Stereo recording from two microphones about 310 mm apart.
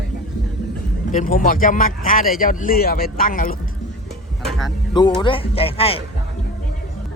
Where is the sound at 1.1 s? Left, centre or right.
Left.